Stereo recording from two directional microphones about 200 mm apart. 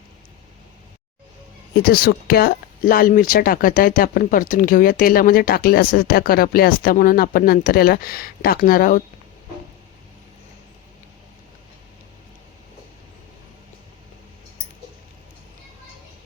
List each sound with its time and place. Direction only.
1.8 s speech: 50° left (ahead or behind)